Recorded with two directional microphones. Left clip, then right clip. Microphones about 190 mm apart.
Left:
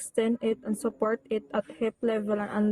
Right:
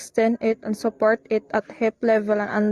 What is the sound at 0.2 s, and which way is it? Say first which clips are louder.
Speech: right 7 dB; 30° right (ahead or behind).